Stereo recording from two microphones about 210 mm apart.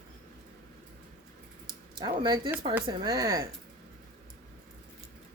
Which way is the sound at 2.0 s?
20° right (ahead or behind).